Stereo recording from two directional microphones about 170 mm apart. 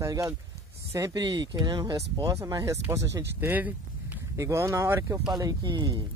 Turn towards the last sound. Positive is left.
turn(degrees=-25)  # may be behind; listen again after turning